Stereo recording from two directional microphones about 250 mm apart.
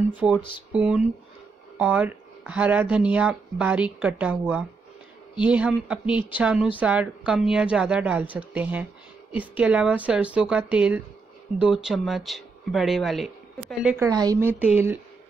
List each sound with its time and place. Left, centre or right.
0.1 s speech: centre
0.4 s speech: centre
0.7 s speech: centre